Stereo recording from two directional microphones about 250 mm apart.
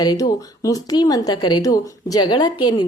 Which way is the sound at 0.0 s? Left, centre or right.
Centre.